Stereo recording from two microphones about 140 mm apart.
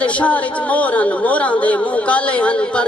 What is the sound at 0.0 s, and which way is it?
A man's voice, 10° left (ahead or behind).